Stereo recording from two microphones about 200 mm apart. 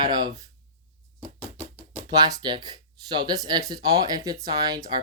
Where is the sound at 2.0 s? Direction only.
20° right (ahead or behind).